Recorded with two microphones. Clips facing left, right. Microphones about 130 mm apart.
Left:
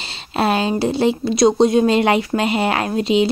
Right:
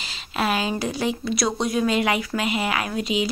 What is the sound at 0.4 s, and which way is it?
A woman's voice, 30° left (ahead or behind).